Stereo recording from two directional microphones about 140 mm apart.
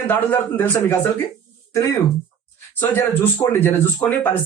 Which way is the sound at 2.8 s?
15° left (ahead or behind).